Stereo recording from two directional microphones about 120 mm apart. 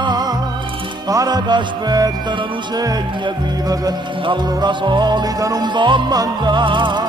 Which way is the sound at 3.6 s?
35° right (ahead or behind).